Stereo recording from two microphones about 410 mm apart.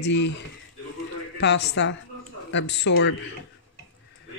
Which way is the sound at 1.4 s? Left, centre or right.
Left.